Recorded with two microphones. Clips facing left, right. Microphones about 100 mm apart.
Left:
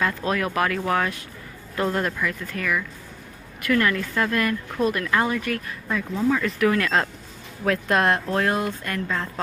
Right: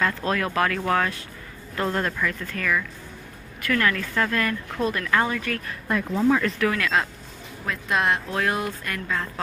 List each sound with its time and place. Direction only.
0.0 s speech: 20° left (ahead or behind)
5.9 s speech: 5° right (ahead or behind)
6.6 s speech: 30° left (ahead or behind)
7.9 s speech: 45° left (ahead or behind); by 9.3 s 25° left (ahead or behind)